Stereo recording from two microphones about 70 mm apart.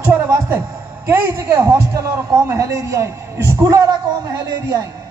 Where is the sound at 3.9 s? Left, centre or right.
Right.